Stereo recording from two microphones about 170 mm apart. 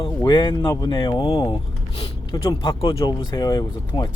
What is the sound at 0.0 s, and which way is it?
Speech, 25° left (ahead or behind).